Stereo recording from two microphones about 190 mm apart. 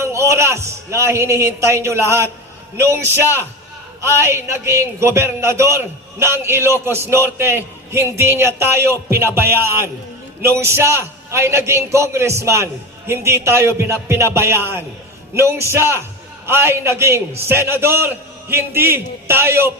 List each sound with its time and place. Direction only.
0.0 s a man's voice: 15° right (ahead or behind)
4.0 s a man's voice: 15° right (ahead or behind)